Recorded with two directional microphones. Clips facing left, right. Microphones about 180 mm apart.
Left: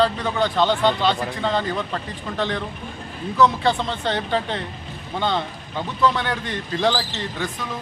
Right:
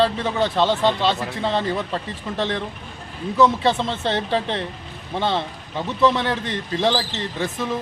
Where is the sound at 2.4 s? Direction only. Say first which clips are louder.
Even; 25° right (ahead or behind).